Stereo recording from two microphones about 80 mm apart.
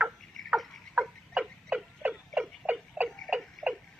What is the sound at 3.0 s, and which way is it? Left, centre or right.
Clock, centre.